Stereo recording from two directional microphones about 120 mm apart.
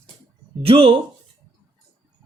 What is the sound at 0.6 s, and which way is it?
Speech, 50° right (ahead or behind).